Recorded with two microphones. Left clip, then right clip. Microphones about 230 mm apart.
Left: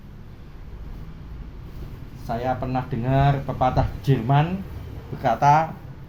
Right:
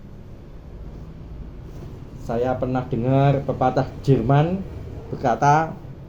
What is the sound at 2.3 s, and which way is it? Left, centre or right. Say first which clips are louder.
Speech: right 3 dB; left.